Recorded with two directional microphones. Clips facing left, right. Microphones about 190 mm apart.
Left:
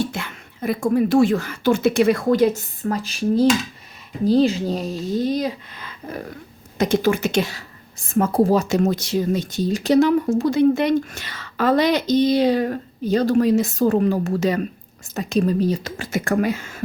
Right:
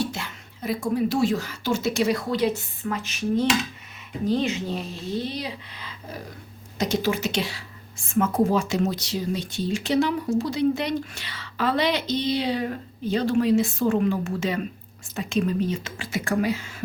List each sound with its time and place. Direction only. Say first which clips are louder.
0.0 s speech: left 3 dB; 55° left (ahead or behind)